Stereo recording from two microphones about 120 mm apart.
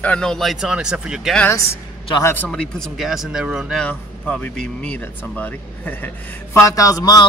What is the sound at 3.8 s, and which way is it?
Speech, 10° left (ahead or behind).